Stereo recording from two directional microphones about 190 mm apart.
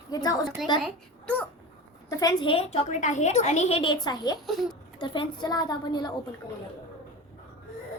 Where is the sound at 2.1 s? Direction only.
20° left (ahead or behind).